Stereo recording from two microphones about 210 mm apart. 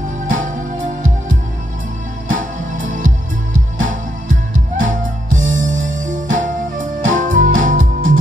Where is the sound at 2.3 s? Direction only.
40° right (ahead or behind).